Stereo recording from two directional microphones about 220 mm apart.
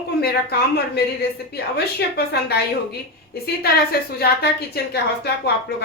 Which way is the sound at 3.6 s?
45° left (ahead or behind).